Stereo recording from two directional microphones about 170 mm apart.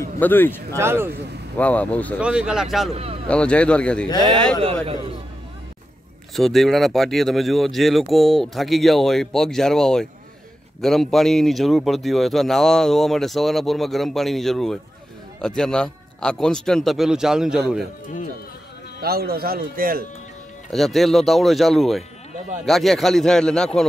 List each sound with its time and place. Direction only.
0.2 s speech: 10° left (ahead or behind)
0.7 s speech: 15° right (ahead or behind)
1.6 s speech: 10° left (ahead or behind)
2.1 s speech: 5° right (ahead or behind)
2.9 s speech: 35° right (ahead or behind)
3.3 s speech: 5° left (ahead or behind)
4.8 s speech: 35° right (ahead or behind)
6.3 s speech: centre (ahead or behind)
18.9 s speech: 65° right (ahead or behind)
20.7 s speech: centre (ahead or behind)